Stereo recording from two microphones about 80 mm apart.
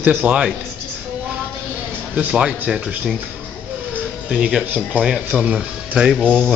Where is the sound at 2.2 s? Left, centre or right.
Centre.